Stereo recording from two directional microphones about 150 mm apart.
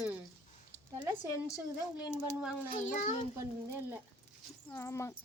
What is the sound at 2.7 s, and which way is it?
Speech, 55° left (ahead or behind).